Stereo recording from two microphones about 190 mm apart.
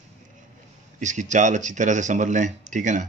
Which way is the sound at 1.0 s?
40° right (ahead or behind).